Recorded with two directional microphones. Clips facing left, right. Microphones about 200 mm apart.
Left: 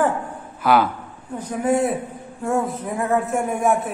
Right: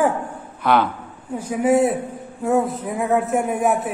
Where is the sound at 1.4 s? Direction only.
10° right (ahead or behind).